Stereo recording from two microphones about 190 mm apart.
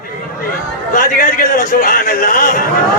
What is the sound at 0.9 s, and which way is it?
A man's voice, 45° left (ahead or behind).